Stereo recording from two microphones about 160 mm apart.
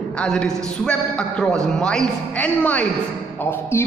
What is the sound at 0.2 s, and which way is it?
A man's voice, 5° left (ahead or behind).